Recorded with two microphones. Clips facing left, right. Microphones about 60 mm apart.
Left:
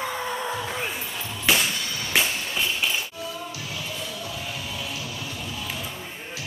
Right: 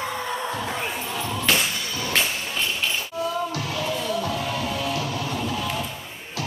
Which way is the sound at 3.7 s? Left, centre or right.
Right.